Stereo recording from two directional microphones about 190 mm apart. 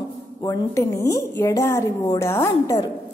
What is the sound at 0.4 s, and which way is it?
A woman's voice, 20° left (ahead or behind).